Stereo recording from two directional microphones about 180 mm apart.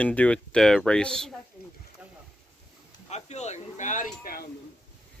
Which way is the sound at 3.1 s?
40° left (ahead or behind).